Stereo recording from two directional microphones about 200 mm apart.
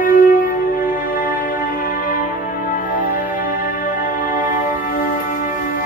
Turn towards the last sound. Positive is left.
turn(degrees=45)  # may be behind; listen again after turning